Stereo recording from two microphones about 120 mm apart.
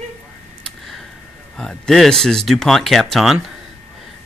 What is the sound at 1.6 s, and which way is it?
Speech, 5° left (ahead or behind).